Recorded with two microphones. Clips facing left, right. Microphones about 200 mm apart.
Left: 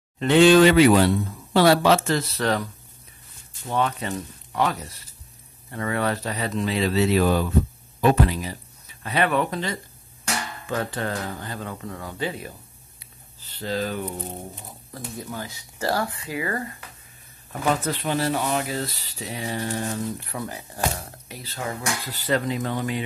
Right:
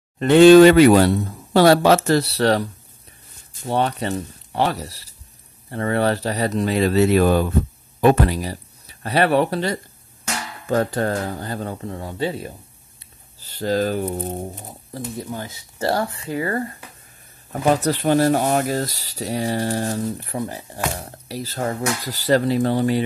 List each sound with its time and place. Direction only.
0.2 s speech: 50° right (ahead or behind)
8.4 s speech: 35° right (ahead or behind)
10.2 s music: 10° left (ahead or behind)
10.7 s speech: 40° right (ahead or behind)
13.5 s speech: 45° right (ahead or behind)
14.7 s speech: 25° right (ahead or behind)